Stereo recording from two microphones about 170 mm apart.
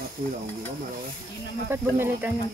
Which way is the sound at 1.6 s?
15° right (ahead or behind).